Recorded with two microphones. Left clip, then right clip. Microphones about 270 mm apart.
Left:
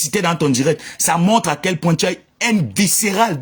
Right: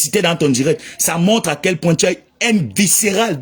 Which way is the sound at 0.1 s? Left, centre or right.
Centre.